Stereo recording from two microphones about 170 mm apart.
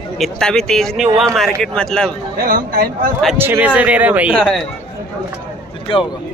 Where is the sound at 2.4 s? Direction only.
60° right (ahead or behind).